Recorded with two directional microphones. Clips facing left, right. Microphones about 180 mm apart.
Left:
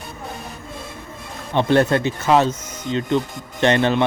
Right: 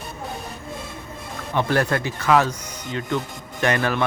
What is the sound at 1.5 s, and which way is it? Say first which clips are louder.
Speech: left 5 dB; 25° left (ahead or behind).